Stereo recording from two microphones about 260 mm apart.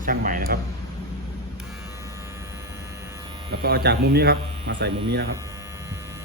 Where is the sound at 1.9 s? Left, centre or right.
Centre.